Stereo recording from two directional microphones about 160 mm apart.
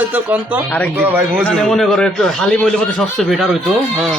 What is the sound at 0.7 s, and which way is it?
Speech, 10° left (ahead or behind).